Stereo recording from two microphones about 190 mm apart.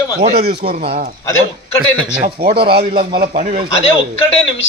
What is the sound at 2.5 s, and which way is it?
Speech, 55° right (ahead or behind).